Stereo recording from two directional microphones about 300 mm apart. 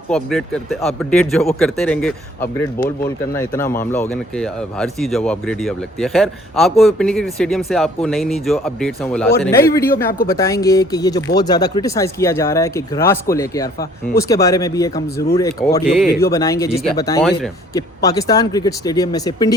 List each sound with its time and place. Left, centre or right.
0.1 s speech: centre
9.9 s speech: left
10.2 s speech: centre